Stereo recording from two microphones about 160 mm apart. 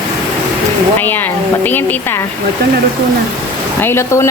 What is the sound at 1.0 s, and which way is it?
A woman's voice, 10° left (ahead or behind).